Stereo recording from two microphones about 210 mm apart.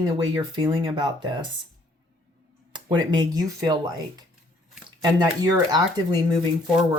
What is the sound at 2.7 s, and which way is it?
Speech, 20° right (ahead or behind).